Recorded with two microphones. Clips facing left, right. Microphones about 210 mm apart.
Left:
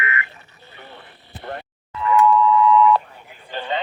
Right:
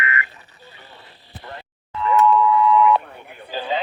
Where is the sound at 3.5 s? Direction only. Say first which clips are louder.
Right 1 dB; 5° right (ahead or behind).